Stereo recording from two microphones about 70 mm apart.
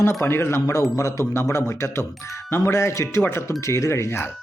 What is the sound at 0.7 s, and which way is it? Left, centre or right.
Speech, left.